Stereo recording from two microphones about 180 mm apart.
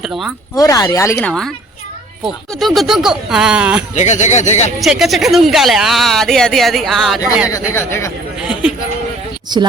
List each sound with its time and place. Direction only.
0.0 s speech: centre (ahead or behind)
0.5 s speech: 20° left (ahead or behind)
1.3 s speech: 5° left (ahead or behind)
3.9 s speech: 40° left (ahead or behind)
4.8 s speech: centre (ahead or behind)
7.5 s speech: 15° left (ahead or behind)
8.4 s a sound: 5° right (ahead or behind)
9.5 s speech: 25° right (ahead or behind)